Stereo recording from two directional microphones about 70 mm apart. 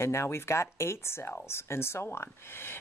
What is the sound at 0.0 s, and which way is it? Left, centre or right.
Speech, left.